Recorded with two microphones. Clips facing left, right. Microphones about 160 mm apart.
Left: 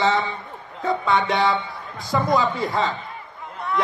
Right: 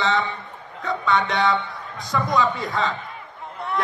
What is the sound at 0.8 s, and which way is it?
A man's voice, 30° left (ahead or behind).